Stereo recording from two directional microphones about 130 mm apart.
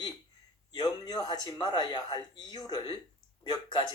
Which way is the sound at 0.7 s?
30° left (ahead or behind).